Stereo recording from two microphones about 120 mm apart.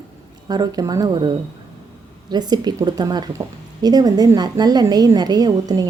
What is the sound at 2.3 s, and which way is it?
A woman's voice, 35° right (ahead or behind).